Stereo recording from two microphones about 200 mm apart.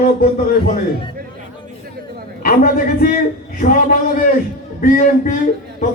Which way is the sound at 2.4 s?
45° left (ahead or behind).